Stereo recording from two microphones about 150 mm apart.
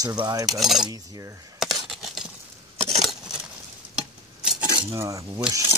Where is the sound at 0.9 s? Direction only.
25° right (ahead or behind).